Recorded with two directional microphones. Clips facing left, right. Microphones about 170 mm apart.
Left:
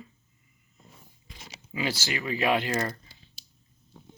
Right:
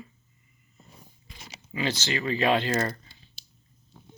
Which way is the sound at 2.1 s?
15° left (ahead or behind).